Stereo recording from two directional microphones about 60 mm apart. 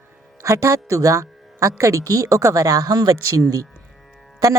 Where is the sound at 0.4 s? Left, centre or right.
Right.